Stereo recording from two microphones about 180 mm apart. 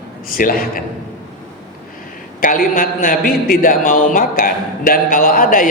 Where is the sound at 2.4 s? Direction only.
50° left (ahead or behind).